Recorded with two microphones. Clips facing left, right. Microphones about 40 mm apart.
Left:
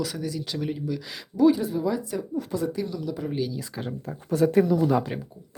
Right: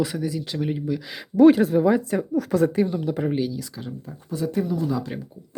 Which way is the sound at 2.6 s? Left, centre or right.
Right.